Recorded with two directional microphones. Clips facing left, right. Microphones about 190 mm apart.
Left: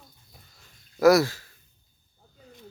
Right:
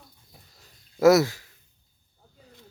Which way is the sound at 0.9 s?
25° right (ahead or behind).